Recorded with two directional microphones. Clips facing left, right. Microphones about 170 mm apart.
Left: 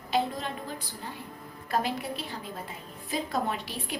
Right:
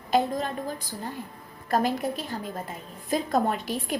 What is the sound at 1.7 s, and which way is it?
A woman's voice, 45° right (ahead or behind).